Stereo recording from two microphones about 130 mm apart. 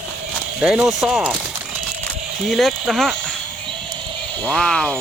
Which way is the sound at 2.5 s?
Centre (ahead or behind).